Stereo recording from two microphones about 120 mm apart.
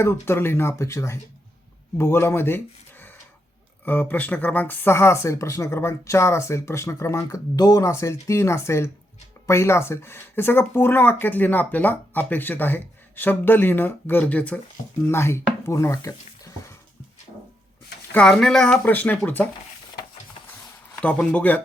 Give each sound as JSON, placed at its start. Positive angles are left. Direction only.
{"t": 0.0, "sound": "speech", "side_deg": 20}
{"t": 3.8, "sound": "speech", "side_deg": 15}
{"t": 18.1, "sound": "speech", "side_deg": 5}
{"t": 20.5, "sound": "a sound", "side_deg": 15}